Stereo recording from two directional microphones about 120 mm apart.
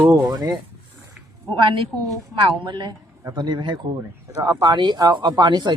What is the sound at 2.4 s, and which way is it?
Speech, 40° right (ahead or behind).